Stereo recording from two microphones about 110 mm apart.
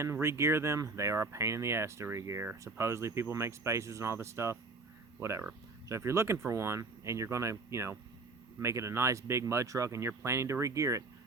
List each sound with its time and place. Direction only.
0.0 s speech: 25° right (ahead or behind)